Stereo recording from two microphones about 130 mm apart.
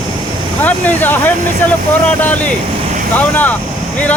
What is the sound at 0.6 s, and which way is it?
Speech, 15° left (ahead or behind).